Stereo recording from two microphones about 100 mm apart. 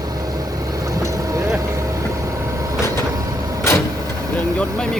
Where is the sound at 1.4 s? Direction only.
30° right (ahead or behind).